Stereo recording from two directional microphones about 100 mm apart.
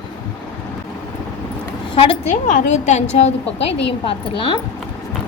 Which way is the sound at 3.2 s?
80° left.